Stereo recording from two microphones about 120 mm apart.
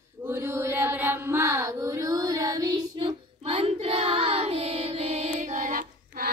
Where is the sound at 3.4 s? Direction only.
55° right (ahead or behind); by 5.7 s 90° right.